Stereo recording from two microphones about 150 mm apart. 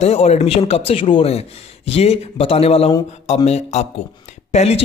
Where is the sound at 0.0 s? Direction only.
45° left (ahead or behind).